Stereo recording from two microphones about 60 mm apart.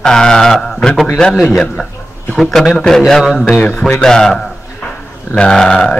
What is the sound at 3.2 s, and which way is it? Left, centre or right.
A man's voice, centre.